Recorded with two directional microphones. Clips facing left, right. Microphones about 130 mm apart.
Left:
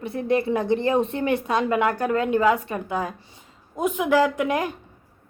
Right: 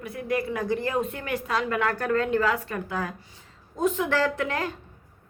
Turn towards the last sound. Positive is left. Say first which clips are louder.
# left 4 dB
turn(degrees=15)  # may be behind; listen again after turning